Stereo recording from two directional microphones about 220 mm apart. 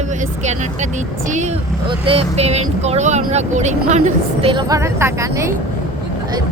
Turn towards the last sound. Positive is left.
turn(degrees=-15)  # may be behind; listen again after turning